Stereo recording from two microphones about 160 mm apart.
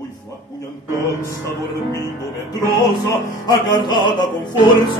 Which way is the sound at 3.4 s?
25° left (ahead or behind).